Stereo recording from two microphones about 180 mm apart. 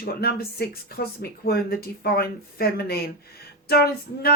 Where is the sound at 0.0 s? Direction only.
60° left (ahead or behind).